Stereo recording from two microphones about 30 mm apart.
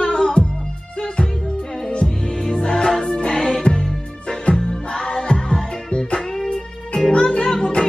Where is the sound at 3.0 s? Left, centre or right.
Left.